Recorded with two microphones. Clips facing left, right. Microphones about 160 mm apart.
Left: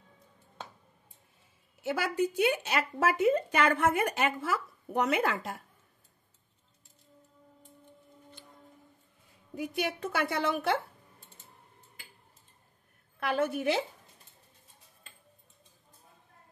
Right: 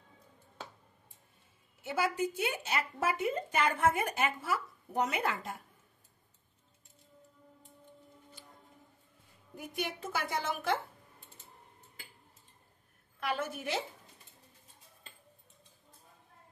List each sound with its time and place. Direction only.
1.8 s speech: 75° left (ahead or behind); by 5.6 s 90° left
9.6 s speech: 70° left (ahead or behind)
13.4 s a woman's voice: 60° left (ahead or behind)